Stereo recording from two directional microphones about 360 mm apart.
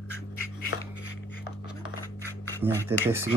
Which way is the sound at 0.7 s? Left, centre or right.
Left.